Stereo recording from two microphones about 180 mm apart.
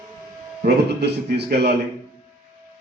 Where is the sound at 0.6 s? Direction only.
65° right (ahead or behind).